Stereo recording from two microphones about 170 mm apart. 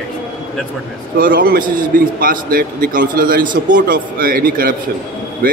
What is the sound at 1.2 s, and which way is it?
A man's voice, 55° right (ahead or behind).